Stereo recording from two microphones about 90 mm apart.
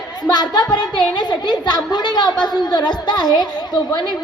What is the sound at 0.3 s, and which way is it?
A woman's voice, 50° left (ahead or behind).